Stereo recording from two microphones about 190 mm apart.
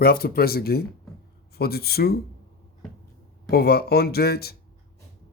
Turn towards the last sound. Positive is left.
turn(degrees=55)  # may be behind; listen again after turning